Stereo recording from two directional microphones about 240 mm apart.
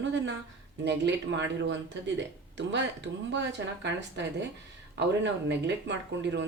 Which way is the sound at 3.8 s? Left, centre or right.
Right.